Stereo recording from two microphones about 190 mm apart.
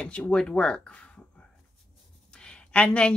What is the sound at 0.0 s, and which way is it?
A woman's voice, 5° left (ahead or behind).